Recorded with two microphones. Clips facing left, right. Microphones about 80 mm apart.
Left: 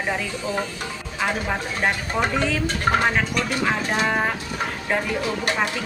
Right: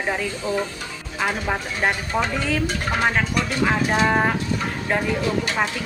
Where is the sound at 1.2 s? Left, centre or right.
Centre.